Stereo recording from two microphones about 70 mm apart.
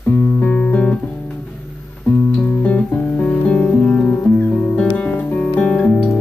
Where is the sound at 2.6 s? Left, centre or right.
Left.